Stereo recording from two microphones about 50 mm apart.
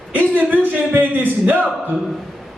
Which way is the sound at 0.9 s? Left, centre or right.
Right.